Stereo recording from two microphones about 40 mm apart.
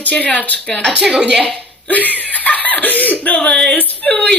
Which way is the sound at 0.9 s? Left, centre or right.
Centre.